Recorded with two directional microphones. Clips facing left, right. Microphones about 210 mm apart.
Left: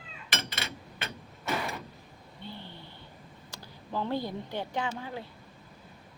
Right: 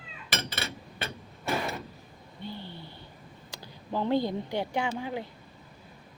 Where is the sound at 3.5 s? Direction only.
15° right (ahead or behind).